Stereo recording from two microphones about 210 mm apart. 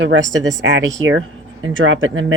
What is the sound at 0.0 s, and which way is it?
Speech, 60° right (ahead or behind).